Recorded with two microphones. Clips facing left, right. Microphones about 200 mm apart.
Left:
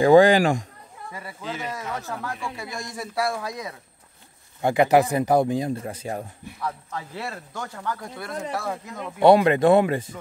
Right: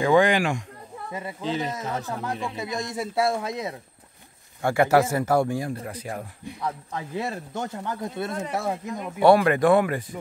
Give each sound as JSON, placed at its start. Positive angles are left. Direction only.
{"t": 0.0, "sound": "a man's voice", "side_deg": 35}
{"t": 1.1, "sound": "speech", "side_deg": -25}
{"t": 4.6, "sound": "speech", "side_deg": 20}
{"t": 6.6, "sound": "speech", "side_deg": -20}
{"t": 9.2, "sound": "speech", "side_deg": 20}